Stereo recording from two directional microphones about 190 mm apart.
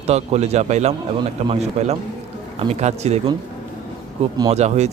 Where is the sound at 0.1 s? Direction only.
35° right (ahead or behind).